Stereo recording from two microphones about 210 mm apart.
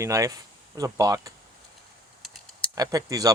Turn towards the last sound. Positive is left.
turn(degrees=-15)  # may be behind; listen again after turning